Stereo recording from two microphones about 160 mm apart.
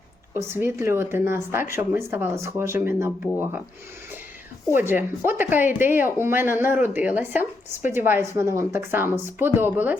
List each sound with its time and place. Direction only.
0.3 s speech: 15° right (ahead or behind)
4.7 s speech: 15° right (ahead or behind)